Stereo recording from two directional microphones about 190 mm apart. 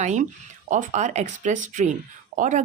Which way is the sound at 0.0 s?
35° right (ahead or behind).